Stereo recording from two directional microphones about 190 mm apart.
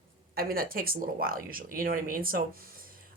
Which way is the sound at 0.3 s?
50° right (ahead or behind).